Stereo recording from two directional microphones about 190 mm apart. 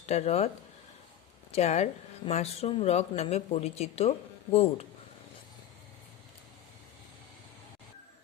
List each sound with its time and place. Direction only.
0.0 s speech: 35° left (ahead or behind)
1.5 s speech: 35° left (ahead or behind)